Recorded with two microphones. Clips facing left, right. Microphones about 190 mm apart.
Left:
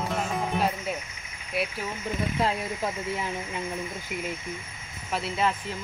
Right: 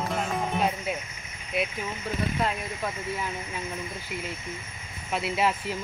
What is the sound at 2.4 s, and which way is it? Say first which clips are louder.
Speech: left 2 dB; 25° left (ahead or behind).